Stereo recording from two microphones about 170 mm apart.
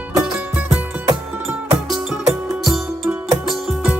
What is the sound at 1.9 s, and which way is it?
Music, 5° right (ahead or behind).